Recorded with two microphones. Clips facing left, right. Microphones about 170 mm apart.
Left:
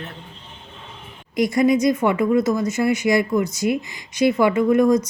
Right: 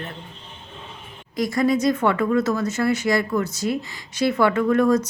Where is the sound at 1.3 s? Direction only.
20° left (ahead or behind).